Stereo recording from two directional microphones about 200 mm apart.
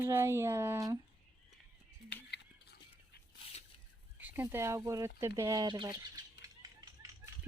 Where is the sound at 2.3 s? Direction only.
55° left (ahead or behind).